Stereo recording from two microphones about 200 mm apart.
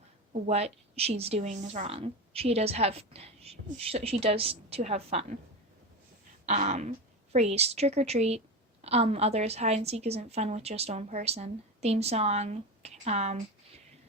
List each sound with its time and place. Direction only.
0.4 s a woman's voice: 30° right (ahead or behind)
6.4 s a woman's voice: 35° right (ahead or behind)